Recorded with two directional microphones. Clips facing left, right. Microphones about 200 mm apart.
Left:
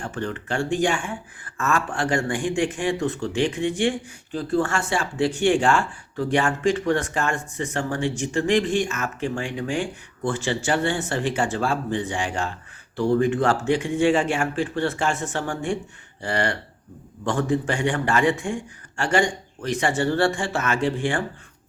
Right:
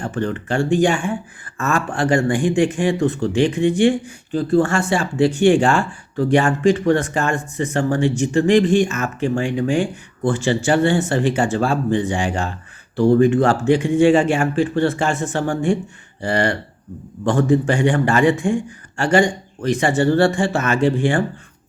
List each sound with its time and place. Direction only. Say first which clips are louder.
0.0 s speech: right 6 dB; 40° right (ahead or behind)